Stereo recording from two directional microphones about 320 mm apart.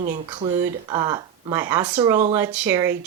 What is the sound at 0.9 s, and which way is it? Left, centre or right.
Speech, centre.